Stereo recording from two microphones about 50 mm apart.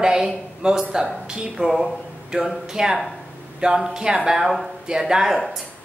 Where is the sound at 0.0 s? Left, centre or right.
Centre.